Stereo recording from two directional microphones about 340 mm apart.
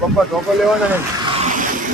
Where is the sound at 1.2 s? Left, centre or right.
Centre.